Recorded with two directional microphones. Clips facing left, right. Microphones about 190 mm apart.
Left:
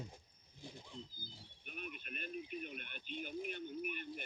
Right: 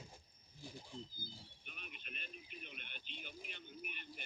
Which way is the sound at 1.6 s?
50° left (ahead or behind).